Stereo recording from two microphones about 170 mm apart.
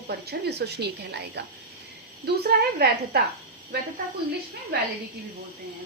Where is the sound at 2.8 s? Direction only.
65° right (ahead or behind).